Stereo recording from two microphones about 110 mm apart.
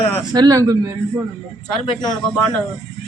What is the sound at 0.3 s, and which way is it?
Speech, 35° right (ahead or behind).